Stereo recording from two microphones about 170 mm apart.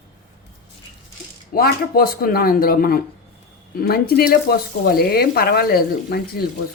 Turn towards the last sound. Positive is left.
turn(degrees=65)  # may be behind; listen again after turning